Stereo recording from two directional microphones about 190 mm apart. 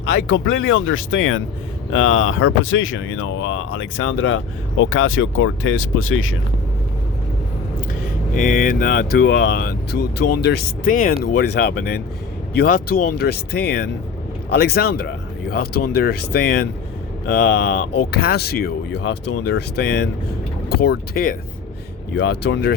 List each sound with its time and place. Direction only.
0.0 s speech: 75° left (ahead or behind); by 6.3 s 90° left
8.4 s speech: 45° left (ahead or behind)
22.1 s speech: 65° left (ahead or behind)